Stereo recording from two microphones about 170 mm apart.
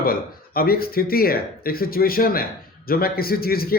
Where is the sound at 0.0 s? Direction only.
60° left (ahead or behind).